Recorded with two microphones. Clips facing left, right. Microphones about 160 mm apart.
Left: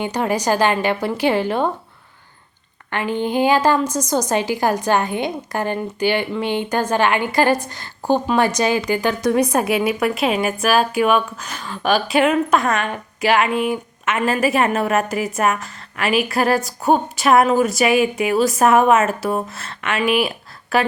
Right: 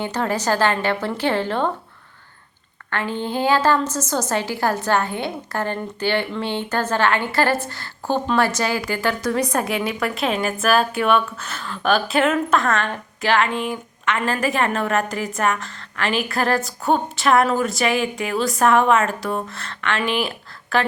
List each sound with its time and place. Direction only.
0.0 s a woman's voice: 15° left (ahead or behind)
2.9 s a woman's voice: 15° left (ahead or behind)
10.2 s a woman's voice: 5° left (ahead or behind)
20.0 s a woman's voice: 10° left (ahead or behind)